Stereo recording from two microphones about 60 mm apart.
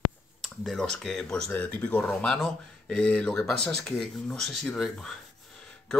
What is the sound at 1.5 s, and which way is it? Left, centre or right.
Speech, left.